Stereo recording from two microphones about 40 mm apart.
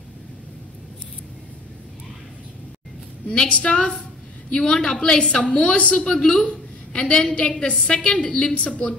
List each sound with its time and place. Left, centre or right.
3.3 s a woman's voice: left
6.4 s a sound: left
7.6 s a woman's voice: left